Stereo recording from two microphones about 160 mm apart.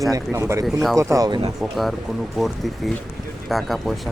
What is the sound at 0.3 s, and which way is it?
Speech, 15° right (ahead or behind).